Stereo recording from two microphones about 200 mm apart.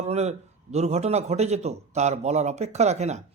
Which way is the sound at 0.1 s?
35° right (ahead or behind).